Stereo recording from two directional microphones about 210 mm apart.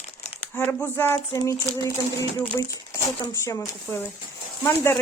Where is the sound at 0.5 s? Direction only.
10° left (ahead or behind).